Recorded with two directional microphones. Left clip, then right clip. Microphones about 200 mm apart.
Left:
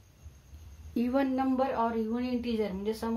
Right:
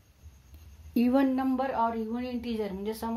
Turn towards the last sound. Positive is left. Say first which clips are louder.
# left 1 dB
turn(degrees=-35)  # may be behind; listen again after turning